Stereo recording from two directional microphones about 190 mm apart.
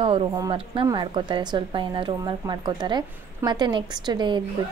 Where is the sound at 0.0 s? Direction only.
30° right (ahead or behind).